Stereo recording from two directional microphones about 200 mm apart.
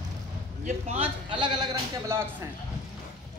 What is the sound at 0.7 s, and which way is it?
A man's voice, 30° right (ahead or behind).